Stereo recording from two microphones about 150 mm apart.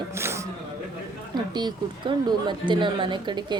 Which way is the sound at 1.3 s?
30° right (ahead or behind).